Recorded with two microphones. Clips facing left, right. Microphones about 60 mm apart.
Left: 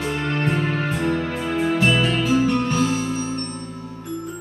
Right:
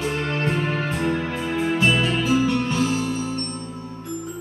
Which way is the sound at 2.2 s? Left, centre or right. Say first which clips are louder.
Left 1 dB; left.